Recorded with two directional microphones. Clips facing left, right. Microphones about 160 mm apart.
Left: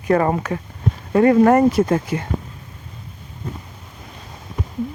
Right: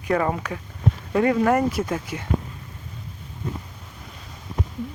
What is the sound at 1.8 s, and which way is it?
Speech, 55° left (ahead or behind).